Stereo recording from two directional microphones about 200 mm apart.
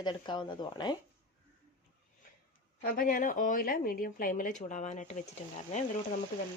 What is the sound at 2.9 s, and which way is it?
Speech, 45° left (ahead or behind).